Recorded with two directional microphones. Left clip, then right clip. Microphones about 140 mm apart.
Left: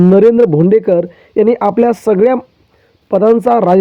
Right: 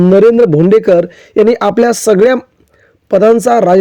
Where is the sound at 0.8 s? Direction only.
35° right (ahead or behind).